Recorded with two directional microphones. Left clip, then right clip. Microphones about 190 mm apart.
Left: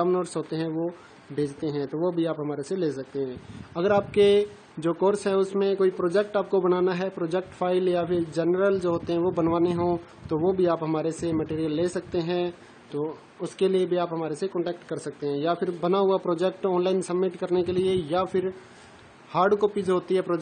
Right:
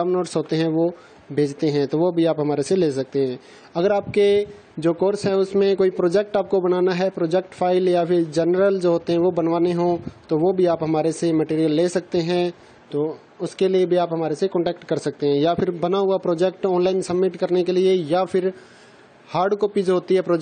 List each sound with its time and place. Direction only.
0.0 s a man's voice: 25° right (ahead or behind)
3.7 s speech: 20° right (ahead or behind)